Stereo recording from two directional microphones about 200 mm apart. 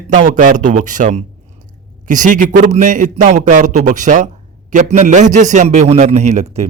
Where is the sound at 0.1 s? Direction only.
40° right (ahead or behind).